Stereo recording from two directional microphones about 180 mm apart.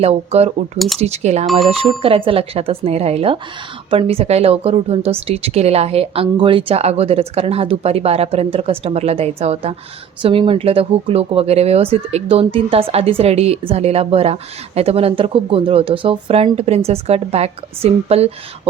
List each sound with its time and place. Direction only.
0.0 s speech: 35° right (ahead or behind)